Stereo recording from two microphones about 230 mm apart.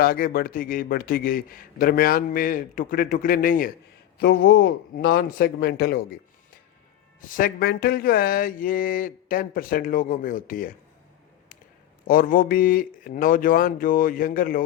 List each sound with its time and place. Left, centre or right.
0.0 s a man's voice: left
4.2 s speech: left
7.2 s a man's voice: left
12.0 s a man's voice: left